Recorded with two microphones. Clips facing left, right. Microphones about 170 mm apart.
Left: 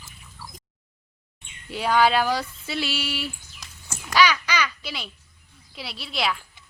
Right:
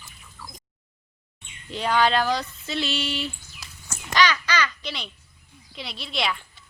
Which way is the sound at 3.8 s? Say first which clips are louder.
Left 2 dB; 10° left (ahead or behind).